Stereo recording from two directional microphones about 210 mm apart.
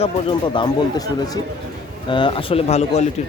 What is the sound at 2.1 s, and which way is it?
Speech, 25° left (ahead or behind).